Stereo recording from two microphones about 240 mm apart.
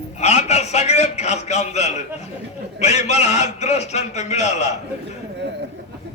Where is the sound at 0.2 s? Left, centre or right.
Left.